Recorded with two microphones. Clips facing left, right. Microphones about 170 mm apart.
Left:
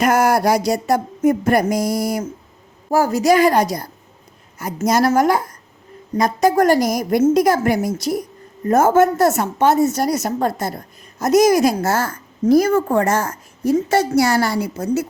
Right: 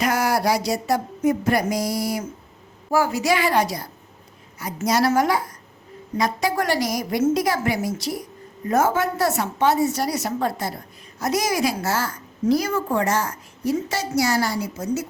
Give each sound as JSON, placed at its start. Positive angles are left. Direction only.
{"t": 0.0, "sound": "a woman's voice", "side_deg": 50}